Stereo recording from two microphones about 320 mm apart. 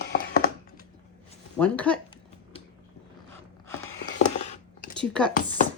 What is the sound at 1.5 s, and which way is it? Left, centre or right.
Speech, centre.